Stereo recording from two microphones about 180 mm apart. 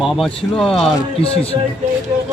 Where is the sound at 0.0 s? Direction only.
Centre (ahead or behind).